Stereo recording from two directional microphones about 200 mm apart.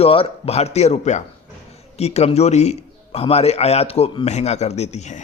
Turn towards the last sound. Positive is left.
turn(degrees=35)  # may be behind; listen again after turning